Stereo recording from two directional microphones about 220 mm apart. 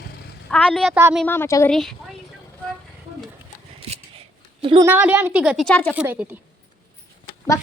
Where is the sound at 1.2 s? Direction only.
10° left (ahead or behind).